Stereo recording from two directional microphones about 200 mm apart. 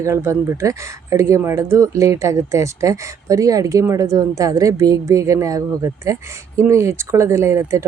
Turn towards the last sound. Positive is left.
turn(degrees=-15)  # may be behind; listen again after turning